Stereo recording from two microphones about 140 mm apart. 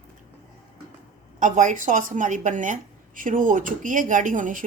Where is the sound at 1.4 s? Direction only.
65° right (ahead or behind).